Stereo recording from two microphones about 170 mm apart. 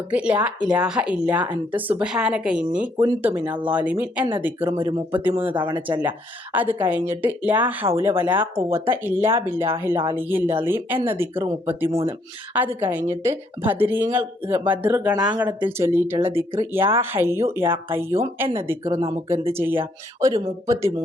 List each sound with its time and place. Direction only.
0.1 s speech: 5° right (ahead or behind)
15.3 s speech: 25° right (ahead or behind)
15.6 s speech: 10° right (ahead or behind)